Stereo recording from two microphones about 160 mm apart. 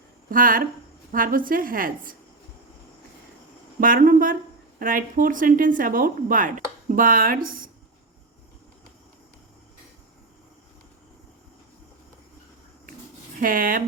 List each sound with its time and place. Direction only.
0.3 s speech: 60° right (ahead or behind)
3.8 s speech: 60° right (ahead or behind)
13.4 s speech: 60° right (ahead or behind)